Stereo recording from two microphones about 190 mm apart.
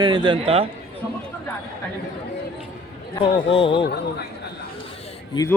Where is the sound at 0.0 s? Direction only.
25° right (ahead or behind).